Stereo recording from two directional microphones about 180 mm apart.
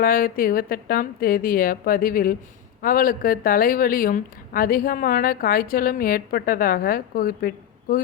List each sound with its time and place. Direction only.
0.0 s a woman's voice: 55° left (ahead or behind)